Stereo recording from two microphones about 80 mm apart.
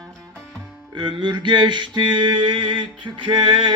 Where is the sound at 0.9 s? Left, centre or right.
Right.